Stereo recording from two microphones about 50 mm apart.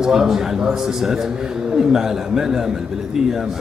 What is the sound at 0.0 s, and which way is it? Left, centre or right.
A man's voice, centre.